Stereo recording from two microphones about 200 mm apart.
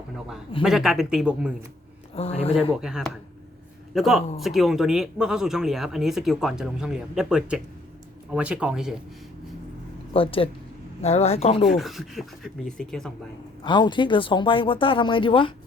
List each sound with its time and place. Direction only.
0.6 s speech: centre (ahead or behind)
2.1 s speech: 30° left (ahead or behind)
2.8 s speech: 5° right (ahead or behind)
10.1 s speech: 25° left (ahead or behind)
11.6 s speech: centre (ahead or behind)
13.7 s speech: 20° left (ahead or behind)